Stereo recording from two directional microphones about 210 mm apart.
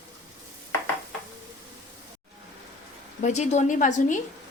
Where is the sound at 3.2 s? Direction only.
35° left (ahead or behind).